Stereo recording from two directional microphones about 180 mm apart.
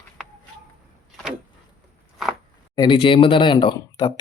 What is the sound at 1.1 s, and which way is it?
Vehicle, centre (ahead or behind).